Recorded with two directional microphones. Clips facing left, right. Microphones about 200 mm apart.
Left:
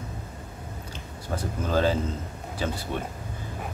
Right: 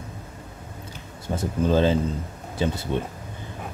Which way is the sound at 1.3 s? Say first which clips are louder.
Right 5 dB; 20° right (ahead or behind).